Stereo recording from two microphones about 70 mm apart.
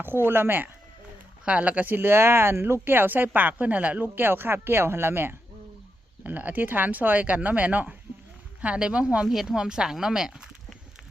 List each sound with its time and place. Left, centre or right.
0.0 s speech: right
1.5 s speech: centre; by 5.4 s right
6.2 s speech: right